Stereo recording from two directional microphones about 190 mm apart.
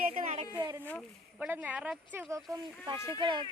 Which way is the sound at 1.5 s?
10° right (ahead or behind).